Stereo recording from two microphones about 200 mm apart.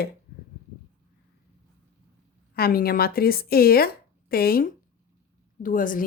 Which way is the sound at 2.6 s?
50° left (ahead or behind).